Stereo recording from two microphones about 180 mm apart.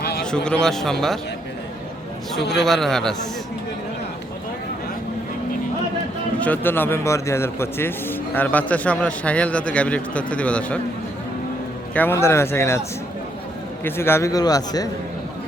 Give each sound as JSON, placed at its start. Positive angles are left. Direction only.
{"t": 0.2, "sound": "a man's voice", "side_deg": 5}
{"t": 2.6, "sound": "a man's voice", "side_deg": 0}
{"t": 6.4, "sound": "speech", "side_deg": 10}
{"t": 11.9, "sound": "speech", "side_deg": 15}
{"t": 13.8, "sound": "speech", "side_deg": 15}